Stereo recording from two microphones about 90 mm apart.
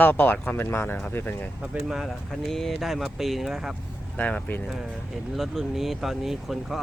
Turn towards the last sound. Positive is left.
turn(degrees=0)  # may be behind; listen again after turning